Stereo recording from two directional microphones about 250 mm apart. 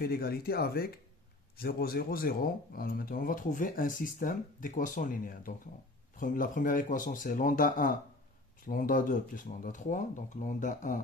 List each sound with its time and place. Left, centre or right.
0.0 s speech: left